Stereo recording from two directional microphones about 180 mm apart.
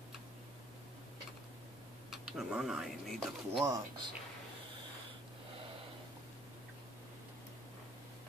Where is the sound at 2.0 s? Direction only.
Centre (ahead or behind).